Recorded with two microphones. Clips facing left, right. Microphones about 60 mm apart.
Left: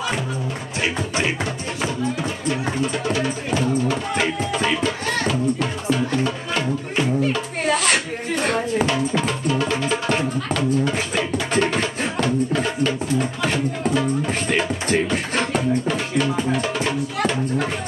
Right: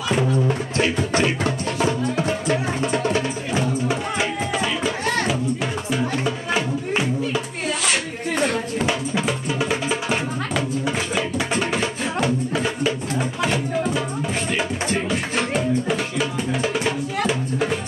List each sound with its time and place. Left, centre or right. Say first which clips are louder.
0.7 s music: right 2 dB; centre
2.1 s music: right 3 dB; right
3.5 s music: left 2 dB; centre
8.8 s music: left 1 dB; centre
15.0 s music: even; centre